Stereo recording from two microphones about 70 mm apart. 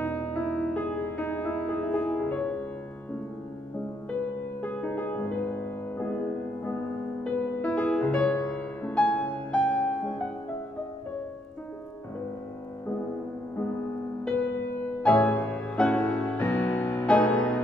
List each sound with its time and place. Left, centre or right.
0.0 s music: left
4.6 s music: left
7.2 s music: centre
15.0 s music: left
16.3 s music: left
17.0 s music: centre